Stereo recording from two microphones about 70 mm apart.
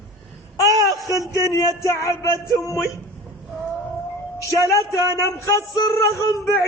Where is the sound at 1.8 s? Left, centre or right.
Left.